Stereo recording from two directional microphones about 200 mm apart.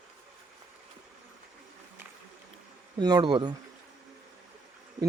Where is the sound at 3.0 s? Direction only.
20° right (ahead or behind).